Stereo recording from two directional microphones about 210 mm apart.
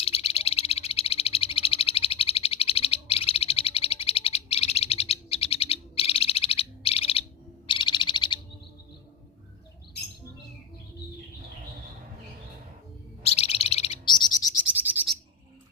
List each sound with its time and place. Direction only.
0.0 s frog: 30° left (ahead or behind)
7.7 s owl: 20° left (ahead or behind)
13.2 s bird: 30° left (ahead or behind)
14.7 s bird: 10° right (ahead or behind)